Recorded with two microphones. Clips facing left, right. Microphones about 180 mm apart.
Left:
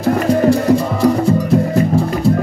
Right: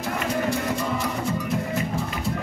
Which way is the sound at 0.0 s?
40° left (ahead or behind).